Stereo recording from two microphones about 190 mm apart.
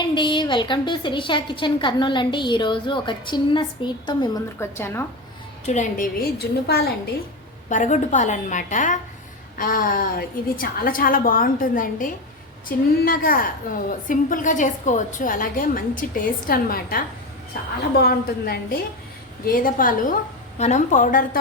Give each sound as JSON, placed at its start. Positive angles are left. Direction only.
{"t": 0.0, "sound": "a woman's voice", "side_deg": 25}
{"t": 5.6, "sound": "a woman's voice", "side_deg": 40}
{"t": 6.7, "sound": "a woman's voice", "side_deg": 55}
{"t": 7.7, "sound": "a woman's voice", "side_deg": 40}